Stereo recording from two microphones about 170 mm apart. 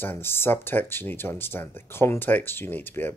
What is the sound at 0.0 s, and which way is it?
Speech, 10° left (ahead or behind).